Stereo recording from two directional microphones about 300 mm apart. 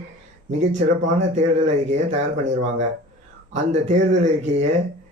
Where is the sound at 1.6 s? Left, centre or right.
Right.